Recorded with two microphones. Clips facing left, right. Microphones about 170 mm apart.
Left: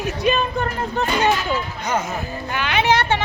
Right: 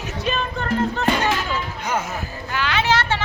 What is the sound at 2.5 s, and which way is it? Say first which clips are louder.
Speech: left 2 dB; 15° left (ahead or behind).